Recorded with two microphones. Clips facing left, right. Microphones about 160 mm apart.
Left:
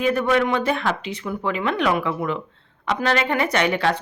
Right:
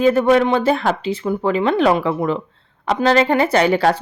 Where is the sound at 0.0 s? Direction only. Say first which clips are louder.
Right 6 dB; 30° right (ahead or behind).